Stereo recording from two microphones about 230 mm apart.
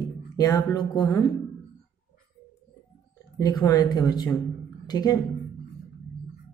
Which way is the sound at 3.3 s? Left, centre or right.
Centre.